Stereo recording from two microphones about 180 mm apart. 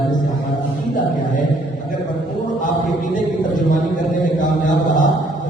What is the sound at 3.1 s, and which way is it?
A man's voice, 45° left (ahead or behind).